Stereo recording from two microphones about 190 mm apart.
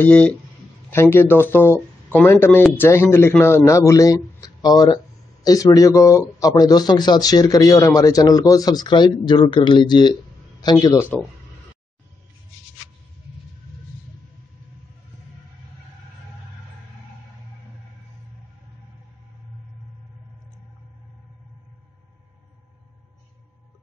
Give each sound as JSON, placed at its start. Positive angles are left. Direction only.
{"t": 0.0, "sound": "speech", "side_deg": 5}